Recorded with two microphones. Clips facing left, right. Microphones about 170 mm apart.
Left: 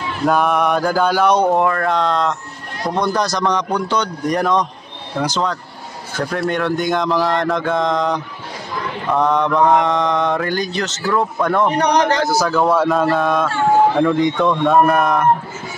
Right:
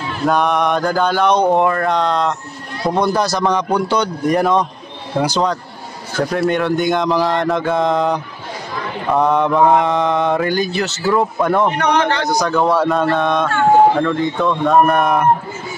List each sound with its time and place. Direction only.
0.3 s mantra: 5° left (ahead or behind)
2.9 s speech: 5° right (ahead or behind)
6.3 s mantra: centre (ahead or behind)
11.7 s a man's voice: 35° left (ahead or behind)
12.2 s mantra: 5° left (ahead or behind)
13.9 s speech: 15° left (ahead or behind)
14.4 s mantra: centre (ahead or behind)